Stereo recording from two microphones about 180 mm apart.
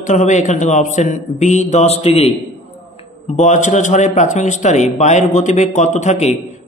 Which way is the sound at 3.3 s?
40° left (ahead or behind).